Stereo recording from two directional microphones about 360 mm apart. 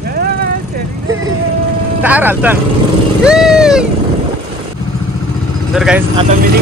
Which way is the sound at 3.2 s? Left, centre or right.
Centre.